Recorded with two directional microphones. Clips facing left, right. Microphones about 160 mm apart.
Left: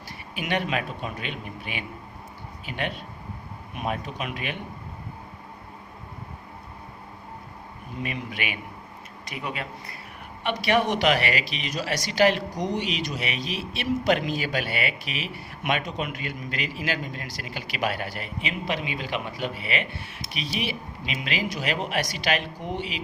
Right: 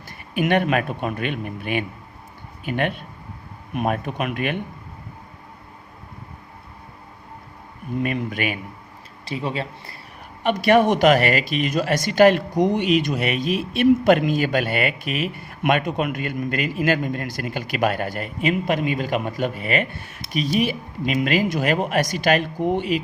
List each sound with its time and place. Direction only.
0.3 s speech: 50° right (ahead or behind)
8.0 s speech: 50° right (ahead or behind)
9.2 s speech: 30° right (ahead or behind)
10.4 s speech: 45° right (ahead or behind)